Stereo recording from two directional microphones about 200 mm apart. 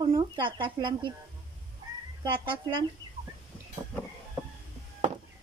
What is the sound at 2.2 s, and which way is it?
Speech, 25° right (ahead or behind).